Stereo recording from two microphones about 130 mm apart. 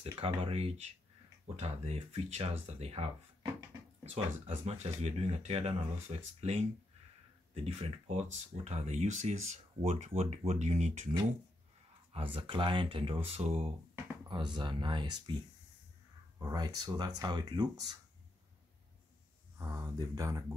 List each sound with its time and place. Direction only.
0.2 s speech: 50° right (ahead or behind)
12.1 s speech: 45° right (ahead or behind)
14.3 s speech: 35° right (ahead or behind)
16.3 s speech: 30° right (ahead or behind)
19.6 s speech: 25° right (ahead or behind)